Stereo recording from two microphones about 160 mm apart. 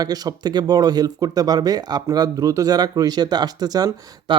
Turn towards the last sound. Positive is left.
turn(degrees=-25)  # may be behind; listen again after turning